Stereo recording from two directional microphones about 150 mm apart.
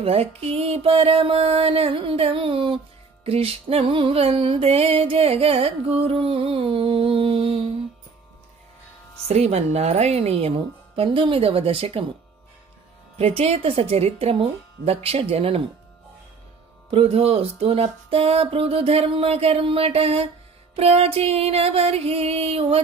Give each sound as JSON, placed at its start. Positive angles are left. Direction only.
{"t": 0.0, "sound": "music", "side_deg": -40}
{"t": 9.3, "sound": "speech", "side_deg": -45}
{"t": 11.0, "sound": "music", "side_deg": -35}
{"t": 13.2, "sound": "music", "side_deg": -40}
{"t": 16.9, "sound": "music", "side_deg": -40}